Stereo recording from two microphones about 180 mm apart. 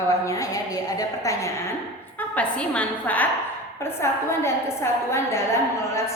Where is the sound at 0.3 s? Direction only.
20° left (ahead or behind).